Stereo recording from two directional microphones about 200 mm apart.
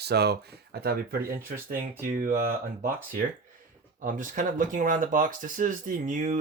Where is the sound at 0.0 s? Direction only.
55° right (ahead or behind).